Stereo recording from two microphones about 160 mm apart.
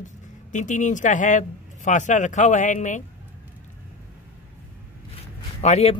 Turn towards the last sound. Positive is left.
turn(degrees=40)  # may be behind; listen again after turning